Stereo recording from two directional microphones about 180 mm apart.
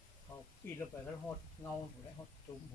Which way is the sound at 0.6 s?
10° left (ahead or behind).